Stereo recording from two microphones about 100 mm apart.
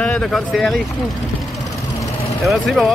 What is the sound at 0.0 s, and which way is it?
Speech, 5° left (ahead or behind).